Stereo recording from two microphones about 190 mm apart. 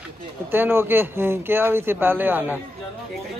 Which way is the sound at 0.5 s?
10° right (ahead or behind).